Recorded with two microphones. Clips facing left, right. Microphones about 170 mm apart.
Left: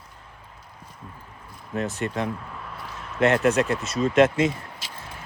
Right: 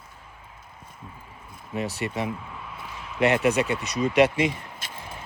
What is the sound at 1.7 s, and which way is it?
Speech, centre (ahead or behind).